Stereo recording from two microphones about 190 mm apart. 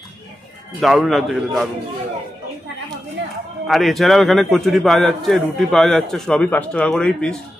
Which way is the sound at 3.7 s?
Centre (ahead or behind).